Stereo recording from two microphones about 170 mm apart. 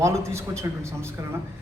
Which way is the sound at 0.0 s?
15° right (ahead or behind).